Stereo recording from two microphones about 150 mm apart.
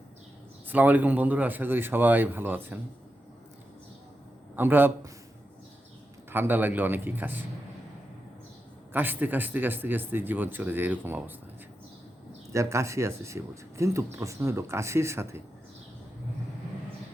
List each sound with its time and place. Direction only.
0.7 s a man's voice: 10° right (ahead or behind)
4.5 s a man's voice: 15° right (ahead or behind)
6.3 s a man's voice: 15° right (ahead or behind)
8.9 s a man's voice: 10° right (ahead or behind)
12.5 s speech: 20° right (ahead or behind)